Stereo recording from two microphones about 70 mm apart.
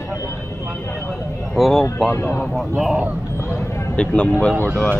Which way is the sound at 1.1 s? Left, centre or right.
Centre.